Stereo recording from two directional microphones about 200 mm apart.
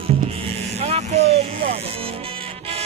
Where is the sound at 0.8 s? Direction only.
30° right (ahead or behind).